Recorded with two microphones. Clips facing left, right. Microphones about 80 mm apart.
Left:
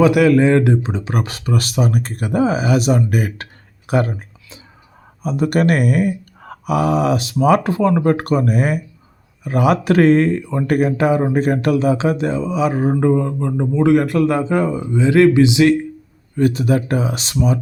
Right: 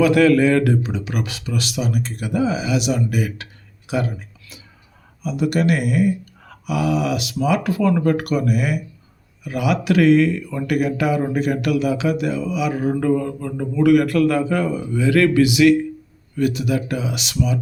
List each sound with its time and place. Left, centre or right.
0.0 s speech: centre; by 7.6 s left
7.6 s speech: left